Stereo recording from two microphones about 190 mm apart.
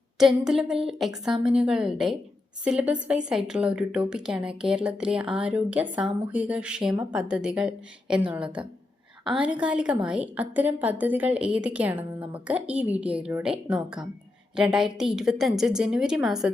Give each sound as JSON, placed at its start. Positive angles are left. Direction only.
{"t": 0.2, "sound": "a woman's voice", "side_deg": 0}